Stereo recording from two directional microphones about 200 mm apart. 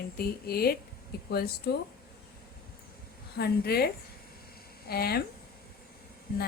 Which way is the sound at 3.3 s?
50° left (ahead or behind).